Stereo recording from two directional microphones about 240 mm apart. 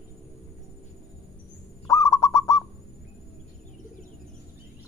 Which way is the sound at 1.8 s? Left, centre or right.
Centre.